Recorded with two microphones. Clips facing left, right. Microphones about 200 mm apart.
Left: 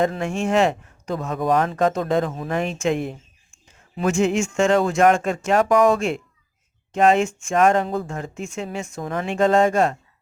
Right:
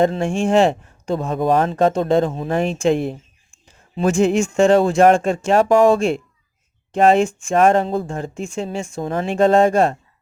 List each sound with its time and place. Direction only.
0.0 s speech: 30° right (ahead or behind)